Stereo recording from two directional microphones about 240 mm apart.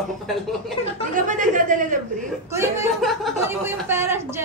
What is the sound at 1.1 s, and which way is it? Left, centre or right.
Speech, right.